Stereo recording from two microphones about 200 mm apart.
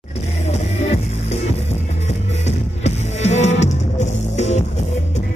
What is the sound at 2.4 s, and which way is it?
Music, 35° left (ahead or behind).